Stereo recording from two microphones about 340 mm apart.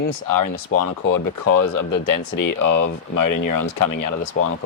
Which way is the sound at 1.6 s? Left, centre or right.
Left.